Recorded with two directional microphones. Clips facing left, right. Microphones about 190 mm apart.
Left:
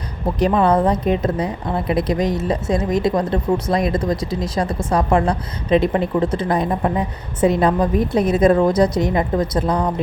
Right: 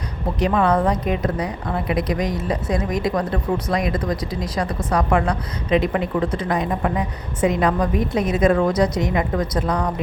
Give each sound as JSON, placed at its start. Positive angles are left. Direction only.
{"t": 0.3, "sound": "a woman's voice", "side_deg": 30}